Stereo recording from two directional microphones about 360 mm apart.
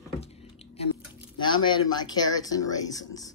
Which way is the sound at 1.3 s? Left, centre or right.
Centre.